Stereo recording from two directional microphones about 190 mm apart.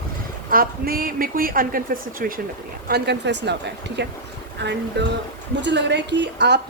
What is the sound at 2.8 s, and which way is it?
A woman's voice, 60° right (ahead or behind).